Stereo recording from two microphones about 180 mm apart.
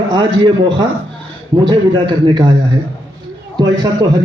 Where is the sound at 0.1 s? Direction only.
25° right (ahead or behind).